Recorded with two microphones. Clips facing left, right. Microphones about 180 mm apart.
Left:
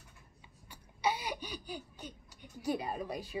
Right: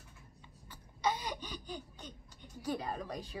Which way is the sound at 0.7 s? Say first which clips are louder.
Left 1 dB; 10° left (ahead or behind).